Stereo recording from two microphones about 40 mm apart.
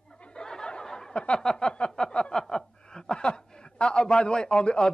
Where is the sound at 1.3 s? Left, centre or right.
Centre.